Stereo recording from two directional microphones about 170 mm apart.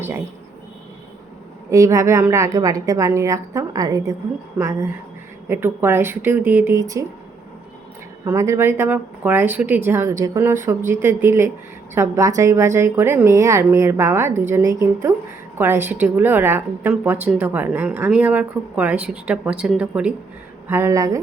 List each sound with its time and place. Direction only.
1.7 s a woman's voice: 20° right (ahead or behind)
8.2 s speech: 20° right (ahead or behind)